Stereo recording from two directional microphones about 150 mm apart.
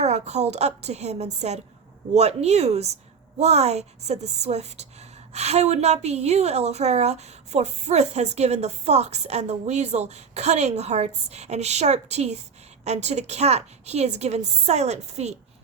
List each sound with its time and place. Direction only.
0.0 s a woman's voice: 45° right (ahead or behind)